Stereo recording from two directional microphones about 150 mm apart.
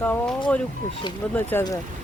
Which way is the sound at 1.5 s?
15° left (ahead or behind).